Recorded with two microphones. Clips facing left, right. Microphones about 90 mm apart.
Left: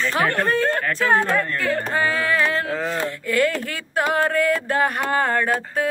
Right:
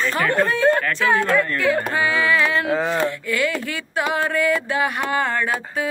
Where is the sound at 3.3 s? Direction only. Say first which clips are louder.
Left 2 dB; 45° left (ahead or behind).